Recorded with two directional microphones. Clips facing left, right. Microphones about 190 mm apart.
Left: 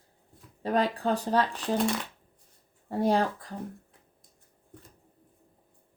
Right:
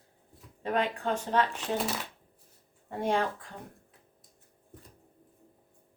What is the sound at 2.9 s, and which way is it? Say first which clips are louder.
Speech: left 4 dB; 35° left (ahead or behind).